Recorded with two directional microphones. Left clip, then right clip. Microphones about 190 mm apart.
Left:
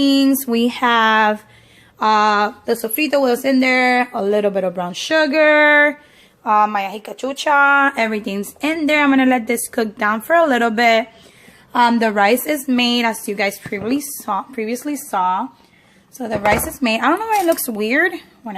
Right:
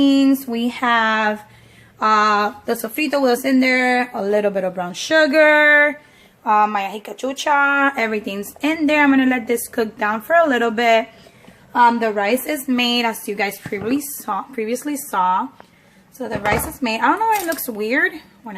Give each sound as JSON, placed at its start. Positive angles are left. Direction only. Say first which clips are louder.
{"t": 0.0, "sound": "speech", "louder": "even", "side_deg": 35}
{"t": 11.7, "sound": "speech", "louder": "even", "side_deg": 45}
{"t": 16.1, "sound": "speech", "louder": "left 3 dB", "side_deg": 30}